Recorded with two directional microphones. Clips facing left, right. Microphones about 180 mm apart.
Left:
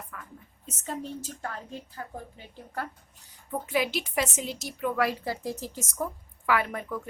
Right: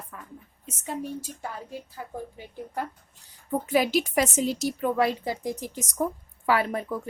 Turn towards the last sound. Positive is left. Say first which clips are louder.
# right 3 dB
turn(degrees=-35)  # may be behind; listen again after turning